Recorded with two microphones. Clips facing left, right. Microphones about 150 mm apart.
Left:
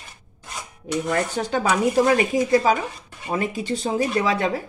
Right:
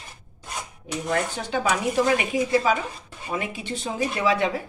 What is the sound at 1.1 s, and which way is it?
Speech, 45° left (ahead or behind).